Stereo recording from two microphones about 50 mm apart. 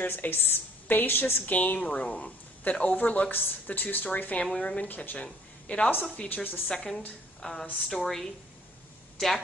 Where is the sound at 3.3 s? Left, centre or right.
Left.